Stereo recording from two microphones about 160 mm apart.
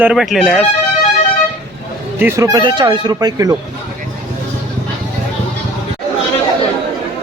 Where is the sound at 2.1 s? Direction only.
15° right (ahead or behind).